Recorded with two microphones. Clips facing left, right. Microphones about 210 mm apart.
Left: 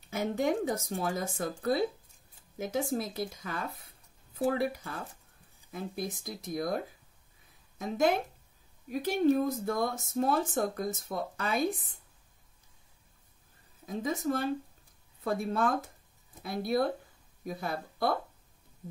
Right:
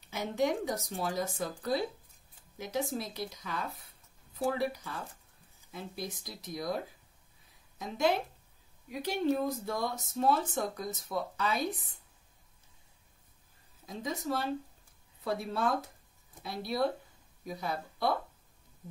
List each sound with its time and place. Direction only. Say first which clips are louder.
0.1 s speech: left 2 dB; 50° left (ahead or behind)
2.6 s speech: left 3 dB; 50° left (ahead or behind)
7.8 s speech: left 2 dB; 50° left (ahead or behind)
13.8 s speech: left 4 dB; 50° left (ahead or behind)